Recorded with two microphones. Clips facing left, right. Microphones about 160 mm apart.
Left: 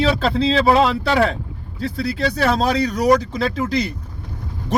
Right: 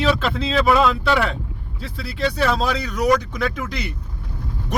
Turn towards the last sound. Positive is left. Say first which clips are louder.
# left 6 dB
turn(degrees=35)  # may be behind; listen again after turning